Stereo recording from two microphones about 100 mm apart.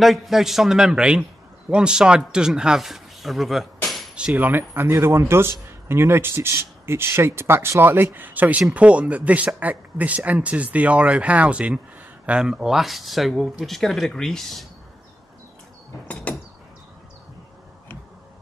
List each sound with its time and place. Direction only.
0.0 s speech: centre (ahead or behind)
4.3 s speech: 20° right (ahead or behind); by 14.7 s 5° left (ahead or behind)
16.3 s a sound: 15° left (ahead or behind)